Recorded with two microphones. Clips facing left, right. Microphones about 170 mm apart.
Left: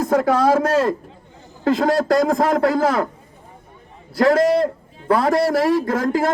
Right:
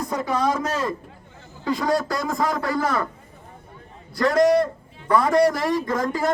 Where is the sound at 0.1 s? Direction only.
65° left (ahead or behind); by 3.1 s 85° left.